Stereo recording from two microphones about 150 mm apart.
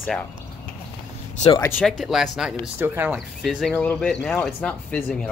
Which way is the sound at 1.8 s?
Centre (ahead or behind).